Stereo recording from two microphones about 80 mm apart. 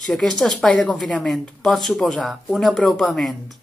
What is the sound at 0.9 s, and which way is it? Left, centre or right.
Speech, centre.